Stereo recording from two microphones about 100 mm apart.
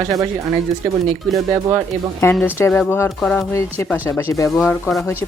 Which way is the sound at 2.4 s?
20° left (ahead or behind).